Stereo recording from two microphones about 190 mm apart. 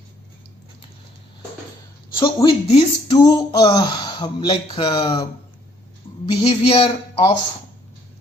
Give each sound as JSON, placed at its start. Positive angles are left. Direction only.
{"t": 2.1, "sound": "speech", "side_deg": 20}
{"t": 2.6, "sound": "a sound", "side_deg": 35}
{"t": 3.2, "sound": "speech", "side_deg": 20}
{"t": 6.4, "sound": "speech", "side_deg": 30}